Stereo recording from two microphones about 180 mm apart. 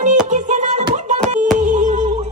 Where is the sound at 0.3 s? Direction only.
40° right (ahead or behind).